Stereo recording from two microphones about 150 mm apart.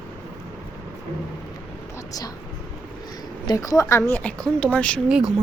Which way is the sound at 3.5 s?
25° left (ahead or behind).